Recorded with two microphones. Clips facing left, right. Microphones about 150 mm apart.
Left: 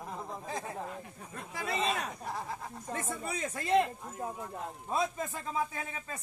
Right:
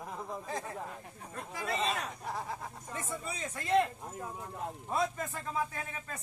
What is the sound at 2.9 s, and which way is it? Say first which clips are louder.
Speech: left 4 dB; 55° left (ahead or behind).